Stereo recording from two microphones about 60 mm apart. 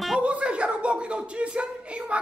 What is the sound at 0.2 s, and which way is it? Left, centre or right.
A woman's voice, right.